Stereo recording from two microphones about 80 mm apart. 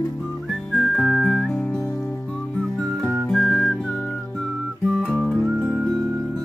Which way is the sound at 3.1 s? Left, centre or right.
Centre.